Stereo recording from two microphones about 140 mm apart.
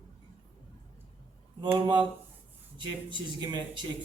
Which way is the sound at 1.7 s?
30° right (ahead or behind).